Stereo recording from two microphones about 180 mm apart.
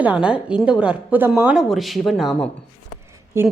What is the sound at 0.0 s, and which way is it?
A woman's voice, 5° right (ahead or behind).